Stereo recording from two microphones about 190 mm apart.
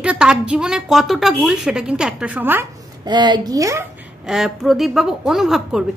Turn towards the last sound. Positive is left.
turn(degrees=0)  # may be behind; listen again after turning